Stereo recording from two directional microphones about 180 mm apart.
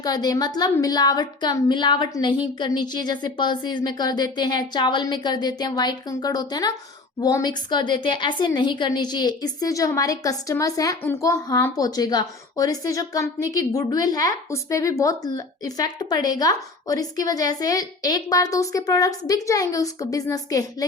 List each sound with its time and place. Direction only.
0.0 s a woman's voice: 20° left (ahead or behind)